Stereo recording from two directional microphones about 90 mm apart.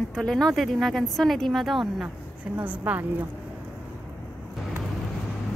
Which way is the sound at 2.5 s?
15° right (ahead or behind).